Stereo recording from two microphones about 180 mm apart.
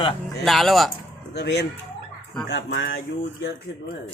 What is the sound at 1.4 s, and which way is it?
Speech, 70° left (ahead or behind).